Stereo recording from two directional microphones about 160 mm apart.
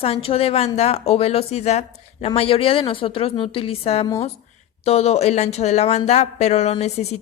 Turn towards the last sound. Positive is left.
turn(degrees=40)  # may be behind; listen again after turning